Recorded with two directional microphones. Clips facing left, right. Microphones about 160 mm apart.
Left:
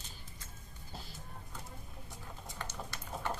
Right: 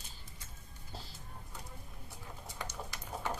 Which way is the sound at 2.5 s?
15° right (ahead or behind).